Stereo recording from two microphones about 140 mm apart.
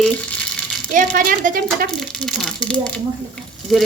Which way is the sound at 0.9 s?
70° right (ahead or behind).